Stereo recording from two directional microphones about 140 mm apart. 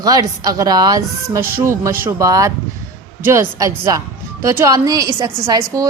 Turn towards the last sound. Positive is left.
turn(degrees=-25)  # may be behind; listen again after turning